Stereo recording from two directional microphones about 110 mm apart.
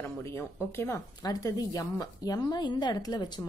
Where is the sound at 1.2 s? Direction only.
35° left (ahead or behind).